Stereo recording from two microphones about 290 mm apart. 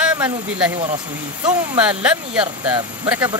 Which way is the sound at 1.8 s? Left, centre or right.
Centre.